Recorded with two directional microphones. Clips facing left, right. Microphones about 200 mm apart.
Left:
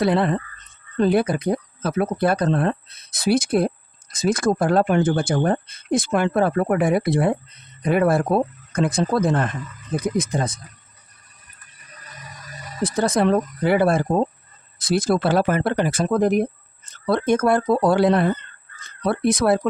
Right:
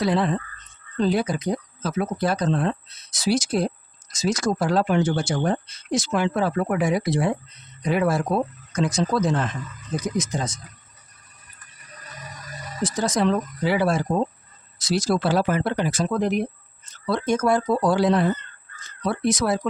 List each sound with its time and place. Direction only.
0.0 s speech: 60° left (ahead or behind)
12.8 s speech: 55° left (ahead or behind)